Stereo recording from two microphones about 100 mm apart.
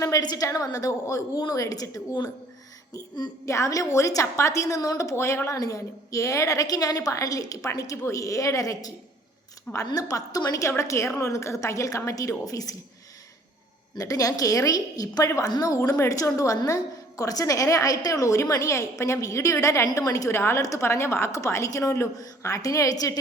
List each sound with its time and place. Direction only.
0.0 s a woman's voice: 40° left (ahead or behind)
13.9 s a woman's voice: 35° left (ahead or behind)